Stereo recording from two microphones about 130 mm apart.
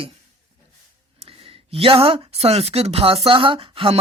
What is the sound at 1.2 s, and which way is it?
Speech, 45° right (ahead or behind).